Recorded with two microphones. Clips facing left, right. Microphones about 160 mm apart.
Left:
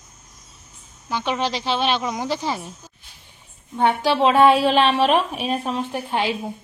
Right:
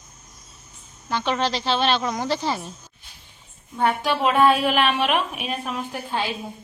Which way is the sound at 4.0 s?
30° left (ahead or behind).